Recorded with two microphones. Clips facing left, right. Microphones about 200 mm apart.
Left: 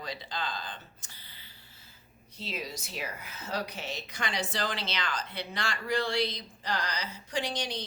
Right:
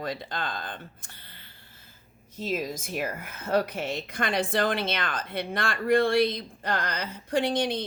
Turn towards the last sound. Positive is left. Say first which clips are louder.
# right 8 dB
turn(degrees=-55)  # may be behind; listen again after turning